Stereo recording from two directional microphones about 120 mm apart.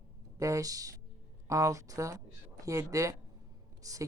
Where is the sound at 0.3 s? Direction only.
25° right (ahead or behind).